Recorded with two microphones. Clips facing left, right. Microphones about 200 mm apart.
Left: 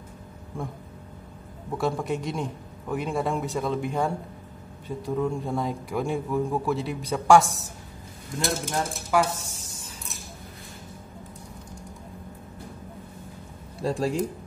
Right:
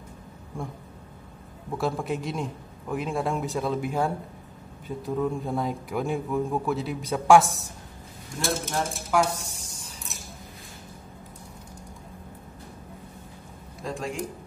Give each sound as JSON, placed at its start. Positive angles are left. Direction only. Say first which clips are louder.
{"t": 1.8, "sound": "a man's voice", "louder": "left 1 dB", "side_deg": 0}
{"t": 13.7, "sound": "speech", "louder": "left 6 dB", "side_deg": 35}